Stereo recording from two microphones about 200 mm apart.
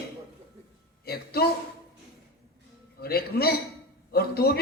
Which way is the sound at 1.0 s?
50° left (ahead or behind).